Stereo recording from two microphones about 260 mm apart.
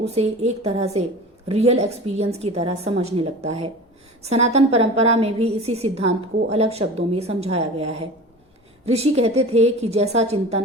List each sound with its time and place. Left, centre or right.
0.0 s a woman's voice: right